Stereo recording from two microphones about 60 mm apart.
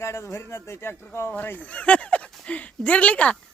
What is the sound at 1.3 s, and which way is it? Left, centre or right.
Speech, left.